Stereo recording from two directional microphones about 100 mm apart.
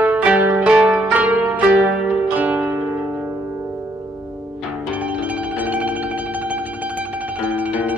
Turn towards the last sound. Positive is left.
turn(degrees=-15)  # may be behind; listen again after turning